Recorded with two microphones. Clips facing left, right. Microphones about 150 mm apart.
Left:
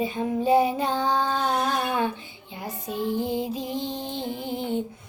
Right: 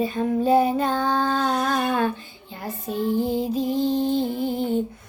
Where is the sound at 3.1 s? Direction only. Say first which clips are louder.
Right 4 dB; 40° right (ahead or behind).